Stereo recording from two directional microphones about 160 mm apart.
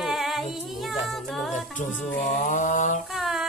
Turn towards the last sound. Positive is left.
turn(degrees=0)  # may be behind; listen again after turning